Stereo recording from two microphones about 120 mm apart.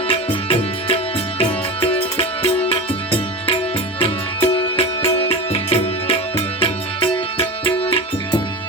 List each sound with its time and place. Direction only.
0.1 s music: 45° left (ahead or behind)